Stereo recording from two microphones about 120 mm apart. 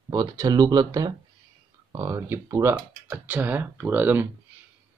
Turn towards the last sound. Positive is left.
turn(degrees=-15)  # may be behind; listen again after turning